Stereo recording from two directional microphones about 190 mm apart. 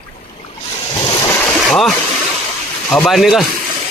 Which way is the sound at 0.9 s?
25° left (ahead or behind).